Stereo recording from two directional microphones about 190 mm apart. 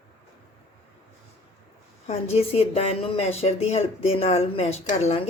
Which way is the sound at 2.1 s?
35° left (ahead or behind).